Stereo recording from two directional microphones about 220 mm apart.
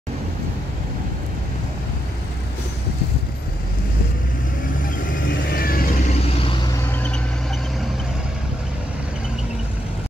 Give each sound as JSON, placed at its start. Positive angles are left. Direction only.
{"t": 5.5, "sound": "vehicle", "side_deg": 40}